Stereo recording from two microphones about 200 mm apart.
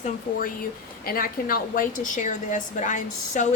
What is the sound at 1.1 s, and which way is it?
A woman's voice, 45° left (ahead or behind).